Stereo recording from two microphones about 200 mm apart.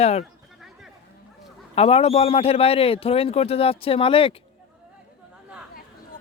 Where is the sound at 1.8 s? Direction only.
30° left (ahead or behind).